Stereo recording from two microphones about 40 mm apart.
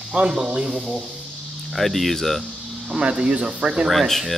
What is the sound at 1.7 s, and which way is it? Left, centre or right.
Speech, centre.